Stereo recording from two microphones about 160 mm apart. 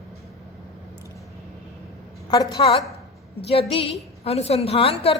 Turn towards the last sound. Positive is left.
turn(degrees=35)  # may be behind; listen again after turning